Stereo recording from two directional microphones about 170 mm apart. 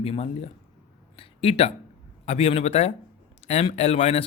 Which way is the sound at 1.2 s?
35° left (ahead or behind).